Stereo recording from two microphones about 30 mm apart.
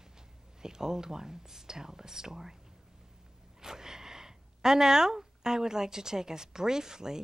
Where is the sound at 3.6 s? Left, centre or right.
Centre.